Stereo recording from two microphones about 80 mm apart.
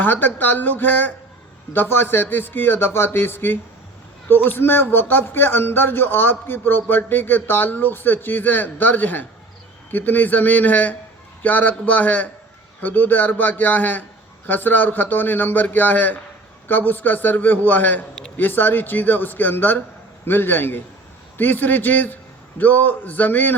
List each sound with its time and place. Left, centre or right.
0.0 s a man's voice: left